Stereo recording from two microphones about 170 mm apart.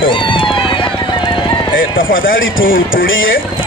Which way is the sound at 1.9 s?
55° left (ahead or behind).